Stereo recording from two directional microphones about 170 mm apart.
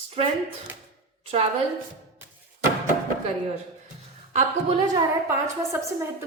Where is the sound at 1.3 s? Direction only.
35° right (ahead or behind).